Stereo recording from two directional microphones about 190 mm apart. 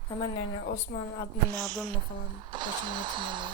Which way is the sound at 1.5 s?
20° right (ahead or behind).